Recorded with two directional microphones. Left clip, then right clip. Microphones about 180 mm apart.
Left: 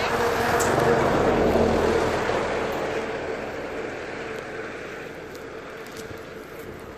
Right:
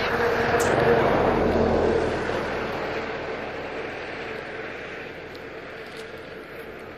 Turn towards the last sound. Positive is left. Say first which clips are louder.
# even
turn(degrees=50)  # may be behind; listen again after turning